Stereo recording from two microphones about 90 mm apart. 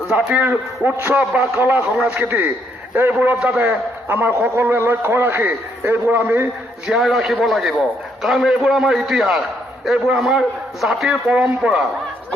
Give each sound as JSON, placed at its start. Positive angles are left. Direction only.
{"t": 0.1, "sound": "a man's voice", "side_deg": -10}
{"t": 1.2, "sound": "a man's voice", "side_deg": -10}
{"t": 6.8, "sound": "a man's voice", "side_deg": -5}